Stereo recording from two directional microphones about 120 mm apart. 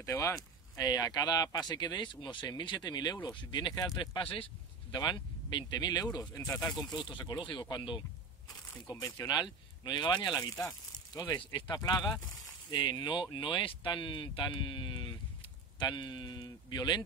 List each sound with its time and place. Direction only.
0.0 s speech: 25° left (ahead or behind)
4.0 s speech: 45° left (ahead or behind); by 6.5 s 25° left (ahead or behind)
6.9 s speech: 40° left (ahead or behind)
8.8 s speech: 30° left (ahead or behind)
11.7 s speech: 35° left (ahead or behind)